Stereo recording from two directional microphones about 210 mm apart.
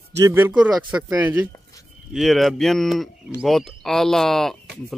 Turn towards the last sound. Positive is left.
turn(degrees=0)  # may be behind; listen again after turning